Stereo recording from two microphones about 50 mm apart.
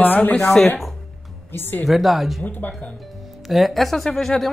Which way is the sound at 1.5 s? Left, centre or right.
Left.